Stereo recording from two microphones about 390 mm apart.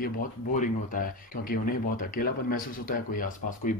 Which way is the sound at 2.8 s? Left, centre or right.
Left.